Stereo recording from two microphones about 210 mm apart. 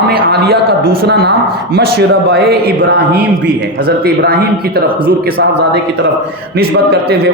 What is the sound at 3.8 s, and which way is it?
A man's voice, 45° right (ahead or behind).